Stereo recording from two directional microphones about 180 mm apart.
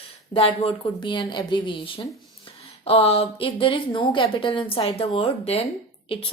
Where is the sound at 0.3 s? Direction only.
30° left (ahead or behind).